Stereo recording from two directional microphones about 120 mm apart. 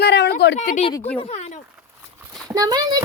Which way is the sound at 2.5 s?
30° right (ahead or behind).